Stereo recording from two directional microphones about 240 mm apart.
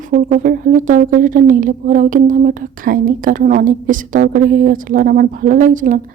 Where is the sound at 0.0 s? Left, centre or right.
Right.